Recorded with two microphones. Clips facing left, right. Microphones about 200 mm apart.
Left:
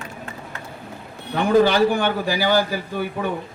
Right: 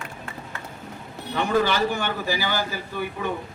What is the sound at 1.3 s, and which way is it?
A man's voice, 50° left (ahead or behind).